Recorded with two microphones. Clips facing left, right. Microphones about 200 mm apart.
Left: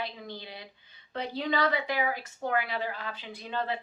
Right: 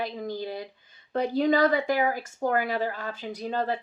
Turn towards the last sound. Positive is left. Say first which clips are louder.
# right 5 dB
turn(degrees=-40)  # may be behind; listen again after turning